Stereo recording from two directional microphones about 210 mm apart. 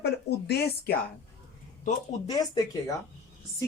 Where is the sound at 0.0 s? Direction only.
50° left (ahead or behind).